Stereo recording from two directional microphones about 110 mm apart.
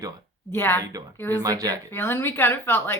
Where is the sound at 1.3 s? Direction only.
35° right (ahead or behind).